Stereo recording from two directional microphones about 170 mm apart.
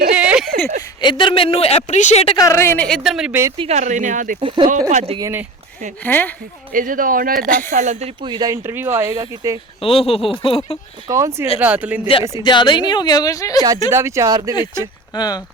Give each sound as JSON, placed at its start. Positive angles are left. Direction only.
{"t": 0.2, "sound": "a sound", "side_deg": -5}
{"t": 1.0, "sound": "a woman's voice", "side_deg": 30}
{"t": 2.4, "sound": "a woman's voice", "side_deg": 15}
{"t": 3.6, "sound": "a man's voice", "side_deg": -40}
{"t": 4.4, "sound": "speech", "side_deg": -30}
{"t": 4.9, "sound": "a man's voice", "side_deg": -45}
{"t": 6.0, "sound": "speech", "side_deg": 10}
{"t": 6.7, "sound": "a man's voice", "side_deg": -50}
{"t": 9.8, "sound": "a woman's voice", "side_deg": 35}
{"t": 11.1, "sound": "speech", "side_deg": -15}
{"t": 12.4, "sound": "a woman's voice", "side_deg": 25}
{"t": 13.6, "sound": "speech", "side_deg": -20}
{"t": 15.1, "sound": "a woman's voice", "side_deg": 25}